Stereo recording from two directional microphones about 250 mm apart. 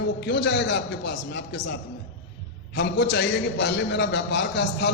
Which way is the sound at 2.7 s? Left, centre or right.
Left.